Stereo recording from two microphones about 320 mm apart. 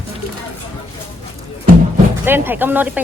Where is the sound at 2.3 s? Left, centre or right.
Centre.